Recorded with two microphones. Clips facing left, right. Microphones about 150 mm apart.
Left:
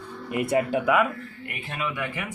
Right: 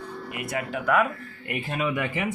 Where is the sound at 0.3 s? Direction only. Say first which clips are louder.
Left 8 dB; 30° left (ahead or behind).